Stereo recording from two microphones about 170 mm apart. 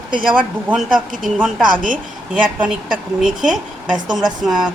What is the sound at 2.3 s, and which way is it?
Speech, 5° right (ahead or behind).